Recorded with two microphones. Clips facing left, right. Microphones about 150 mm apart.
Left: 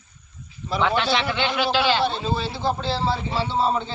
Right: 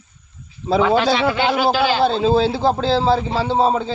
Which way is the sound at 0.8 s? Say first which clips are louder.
Right 6 dB; 40° right (ahead or behind).